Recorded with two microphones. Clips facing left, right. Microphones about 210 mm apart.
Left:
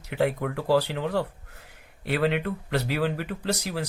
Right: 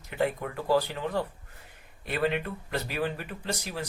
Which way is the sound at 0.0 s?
75° left (ahead or behind).